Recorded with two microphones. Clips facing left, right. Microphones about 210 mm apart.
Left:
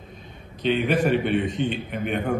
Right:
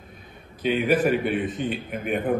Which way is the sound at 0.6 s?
5° right (ahead or behind).